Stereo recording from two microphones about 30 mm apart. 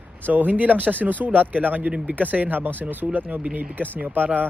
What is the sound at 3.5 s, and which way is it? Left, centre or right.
Speech, right.